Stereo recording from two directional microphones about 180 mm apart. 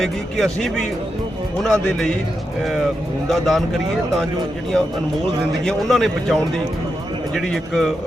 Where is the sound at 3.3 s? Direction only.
Centre (ahead or behind).